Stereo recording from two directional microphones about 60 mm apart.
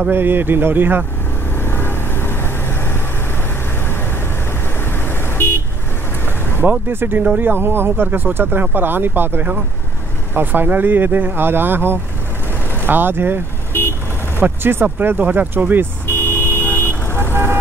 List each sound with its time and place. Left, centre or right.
0.1 s speech: right
1.6 s vehicle: left
5.0 s vehicle: left
6.9 s speech: right
14.4 s speech: right
16.1 s vehicle: left
17.3 s vehicle: right